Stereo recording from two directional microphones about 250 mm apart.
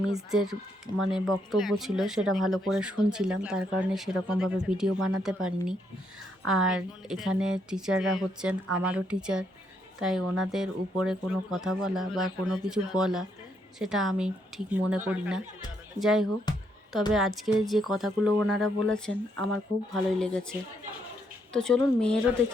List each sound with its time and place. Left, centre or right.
0.1 s speech: centre
16.5 s music: centre
17.1 s speech: centre